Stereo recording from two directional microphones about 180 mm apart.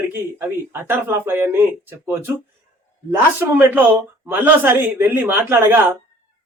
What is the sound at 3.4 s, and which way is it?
A man's voice, 10° right (ahead or behind).